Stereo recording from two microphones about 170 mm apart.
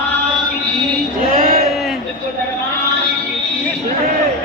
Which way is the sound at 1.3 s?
55° right (ahead or behind).